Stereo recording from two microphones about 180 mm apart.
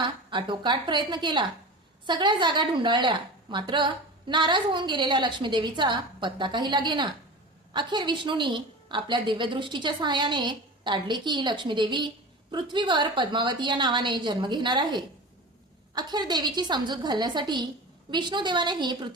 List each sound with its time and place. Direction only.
0.0 s a woman's voice: 25° right (ahead or behind)